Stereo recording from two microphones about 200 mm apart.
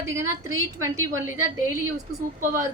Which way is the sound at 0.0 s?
15° right (ahead or behind).